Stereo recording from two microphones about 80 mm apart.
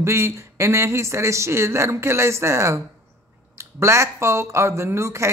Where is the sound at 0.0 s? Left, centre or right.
Right.